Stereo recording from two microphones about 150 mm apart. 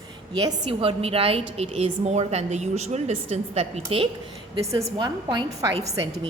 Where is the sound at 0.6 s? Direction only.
40° right (ahead or behind).